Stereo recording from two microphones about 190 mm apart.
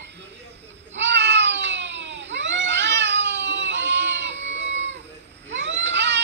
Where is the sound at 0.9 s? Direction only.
70° right (ahead or behind).